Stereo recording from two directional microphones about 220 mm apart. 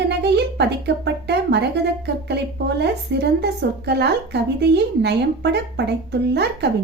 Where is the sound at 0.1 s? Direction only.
50° right (ahead or behind).